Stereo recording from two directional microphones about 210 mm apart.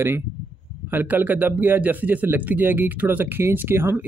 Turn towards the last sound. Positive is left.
turn(degrees=-10)  # may be behind; listen again after turning